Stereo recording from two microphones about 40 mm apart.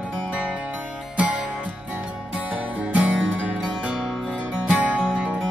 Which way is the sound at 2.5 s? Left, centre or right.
Right.